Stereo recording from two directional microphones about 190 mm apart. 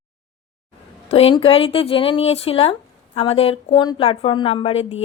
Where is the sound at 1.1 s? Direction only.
30° left (ahead or behind).